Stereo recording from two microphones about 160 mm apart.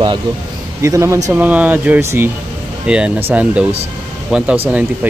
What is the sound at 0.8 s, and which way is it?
Speech, 20° right (ahead or behind).